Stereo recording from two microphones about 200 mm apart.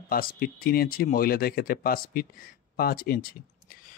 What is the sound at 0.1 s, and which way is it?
Speech, 45° left (ahead or behind).